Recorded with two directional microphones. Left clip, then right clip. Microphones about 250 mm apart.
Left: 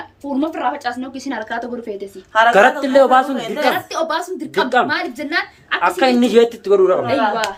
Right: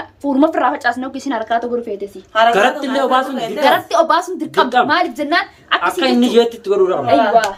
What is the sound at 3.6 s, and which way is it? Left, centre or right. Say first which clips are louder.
A woman's voice: right 6 dB; centre.